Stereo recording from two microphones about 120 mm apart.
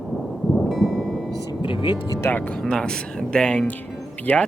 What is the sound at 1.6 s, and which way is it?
Music, 45° left (ahead or behind).